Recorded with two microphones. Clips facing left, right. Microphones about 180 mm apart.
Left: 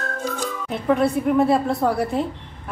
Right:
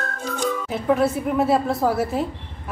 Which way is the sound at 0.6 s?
Centre (ahead or behind).